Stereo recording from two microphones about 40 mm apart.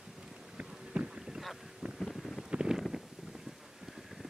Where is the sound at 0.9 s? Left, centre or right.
Right.